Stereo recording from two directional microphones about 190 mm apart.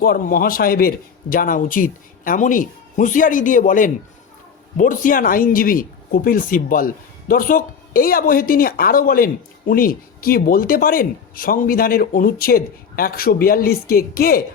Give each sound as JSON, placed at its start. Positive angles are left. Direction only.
{"t": 0.0, "sound": "speech", "side_deg": 50}